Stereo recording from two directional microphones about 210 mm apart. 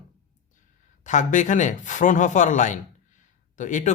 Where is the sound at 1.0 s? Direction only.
35° left (ahead or behind).